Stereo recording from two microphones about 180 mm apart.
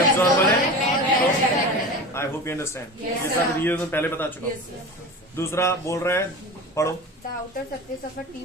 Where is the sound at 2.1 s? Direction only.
15° left (ahead or behind).